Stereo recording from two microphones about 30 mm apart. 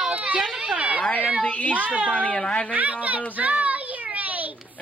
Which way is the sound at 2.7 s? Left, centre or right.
Right.